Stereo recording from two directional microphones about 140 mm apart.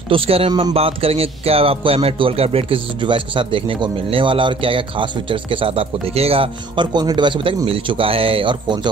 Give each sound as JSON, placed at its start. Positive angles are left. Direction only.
{"t": 0.1, "sound": "speech", "side_deg": -40}
{"t": 0.5, "sound": "speech", "side_deg": -30}
{"t": 0.7, "sound": "speech", "side_deg": -45}